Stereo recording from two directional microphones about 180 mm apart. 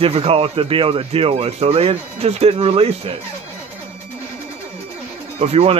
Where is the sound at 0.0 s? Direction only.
35° right (ahead or behind).